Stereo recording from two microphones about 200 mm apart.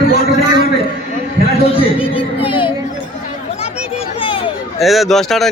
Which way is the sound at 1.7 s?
25° left (ahead or behind).